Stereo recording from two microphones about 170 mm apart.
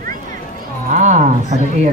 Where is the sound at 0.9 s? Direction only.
45° right (ahead or behind).